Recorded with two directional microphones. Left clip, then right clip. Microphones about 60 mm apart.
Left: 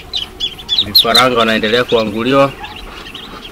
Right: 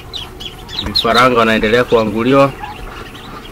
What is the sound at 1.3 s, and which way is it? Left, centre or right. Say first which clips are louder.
Speech: right 1 dB; right.